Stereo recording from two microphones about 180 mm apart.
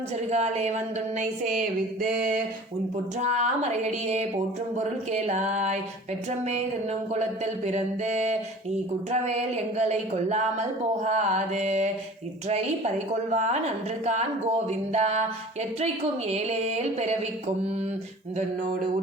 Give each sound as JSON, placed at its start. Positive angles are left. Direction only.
{"t": 0.3, "sound": "speech", "side_deg": -35}
{"t": 1.2, "sound": "a sound", "side_deg": -50}
{"t": 3.2, "sound": "speech", "side_deg": -40}
{"t": 7.1, "sound": "speech", "side_deg": -40}
{"t": 16.3, "sound": "speech", "side_deg": -35}